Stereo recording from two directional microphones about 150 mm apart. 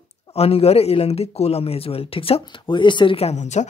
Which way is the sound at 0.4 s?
40° left (ahead or behind).